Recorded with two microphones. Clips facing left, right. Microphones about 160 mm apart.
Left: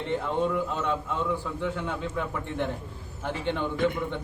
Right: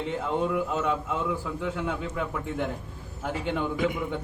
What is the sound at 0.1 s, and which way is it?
A man's voice, 10° right (ahead or behind).